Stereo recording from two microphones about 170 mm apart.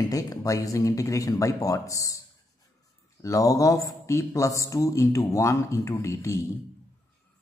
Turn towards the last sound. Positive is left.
turn(degrees=20)  # may be behind; listen again after turning